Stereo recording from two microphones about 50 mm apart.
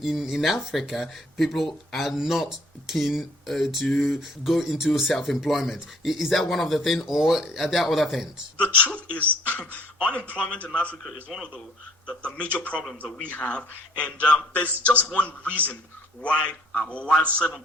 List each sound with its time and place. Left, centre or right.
0.0 s speech: centre
8.5 s a man's voice: left
12.4 s a man's voice: left
14.5 s a man's voice: left